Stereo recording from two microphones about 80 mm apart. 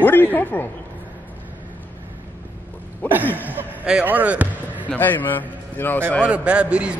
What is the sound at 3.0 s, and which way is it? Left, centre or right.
Speech, left.